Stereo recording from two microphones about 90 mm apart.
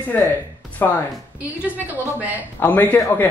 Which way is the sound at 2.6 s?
15° left (ahead or behind).